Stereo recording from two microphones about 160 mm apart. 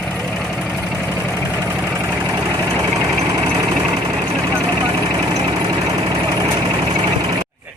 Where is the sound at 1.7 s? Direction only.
10° right (ahead or behind).